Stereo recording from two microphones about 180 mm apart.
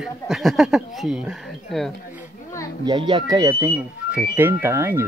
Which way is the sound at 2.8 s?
25° right (ahead or behind).